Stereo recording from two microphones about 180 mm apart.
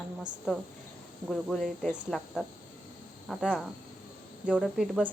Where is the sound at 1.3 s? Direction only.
Centre (ahead or behind).